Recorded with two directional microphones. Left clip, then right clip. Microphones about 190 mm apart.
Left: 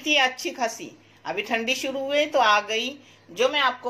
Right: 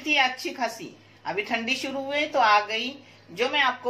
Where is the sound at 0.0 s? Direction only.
50° left (ahead or behind).